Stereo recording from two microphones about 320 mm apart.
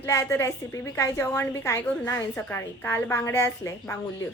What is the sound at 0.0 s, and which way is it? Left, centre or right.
A woman's voice, centre.